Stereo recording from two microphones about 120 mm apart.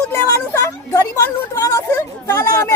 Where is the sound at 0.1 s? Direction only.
25° left (ahead or behind).